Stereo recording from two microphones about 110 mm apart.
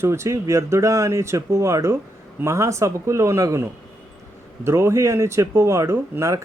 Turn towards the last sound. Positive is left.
turn(degrees=-25)  # may be behind; listen again after turning